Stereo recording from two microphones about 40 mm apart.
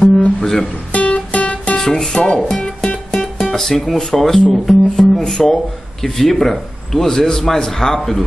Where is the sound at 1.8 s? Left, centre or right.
Centre.